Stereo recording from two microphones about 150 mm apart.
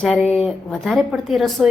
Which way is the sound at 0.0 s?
Centre (ahead or behind).